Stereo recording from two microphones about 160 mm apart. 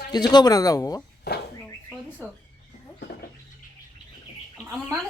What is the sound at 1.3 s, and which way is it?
Speech, 90° left.